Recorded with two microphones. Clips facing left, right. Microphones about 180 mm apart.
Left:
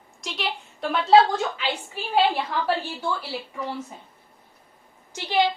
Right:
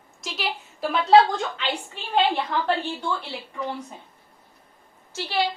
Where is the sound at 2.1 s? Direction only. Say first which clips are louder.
Even; 10° left (ahead or behind).